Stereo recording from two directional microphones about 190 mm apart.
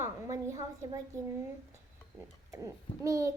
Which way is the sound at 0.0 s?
15° right (ahead or behind).